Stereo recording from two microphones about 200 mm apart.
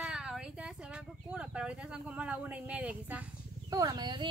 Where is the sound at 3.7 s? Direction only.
20° right (ahead or behind).